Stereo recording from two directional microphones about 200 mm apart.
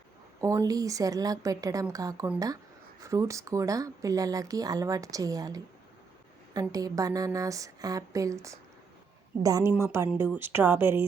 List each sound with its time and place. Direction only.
0.4 s speech: 15° right (ahead or behind)